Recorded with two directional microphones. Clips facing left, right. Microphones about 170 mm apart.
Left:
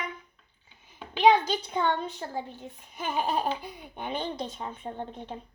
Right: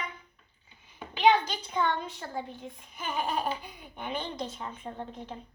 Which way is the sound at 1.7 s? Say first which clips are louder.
Even; 35° left (ahead or behind).